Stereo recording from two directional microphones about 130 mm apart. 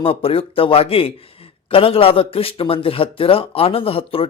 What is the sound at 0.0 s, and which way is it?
A man's voice, 45° left (ahead or behind).